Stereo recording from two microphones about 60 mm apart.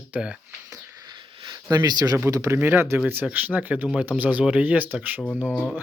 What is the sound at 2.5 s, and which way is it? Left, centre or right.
Speech, right.